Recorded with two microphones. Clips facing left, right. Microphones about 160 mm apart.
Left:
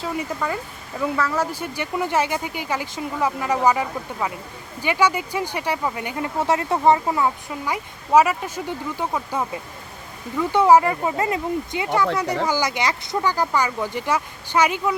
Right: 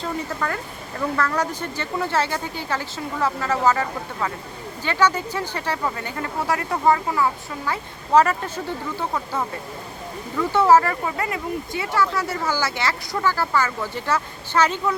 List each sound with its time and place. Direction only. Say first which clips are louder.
0.0 s speech: left 1 dB; 10° left (ahead or behind)
10.5 s speech: left 1 dB; 15° left (ahead or behind)